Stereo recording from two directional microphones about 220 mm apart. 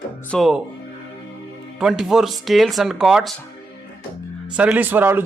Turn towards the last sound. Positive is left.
turn(degrees=-10)  # may be behind; listen again after turning